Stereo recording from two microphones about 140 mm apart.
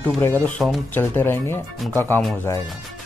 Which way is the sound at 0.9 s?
15° left (ahead or behind).